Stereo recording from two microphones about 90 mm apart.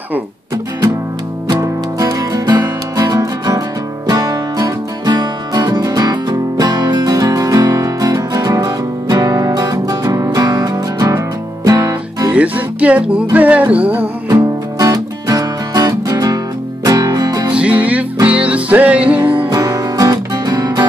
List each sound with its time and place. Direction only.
1.5 s music: 40° right (ahead or behind)
12.3 s music: 15° right (ahead or behind)
14.3 s music: 45° right (ahead or behind)
17.5 s music: 15° right (ahead or behind)
19.5 s music: 45° right (ahead or behind)